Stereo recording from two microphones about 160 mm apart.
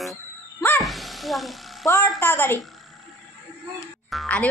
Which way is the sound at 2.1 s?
10° left (ahead or behind).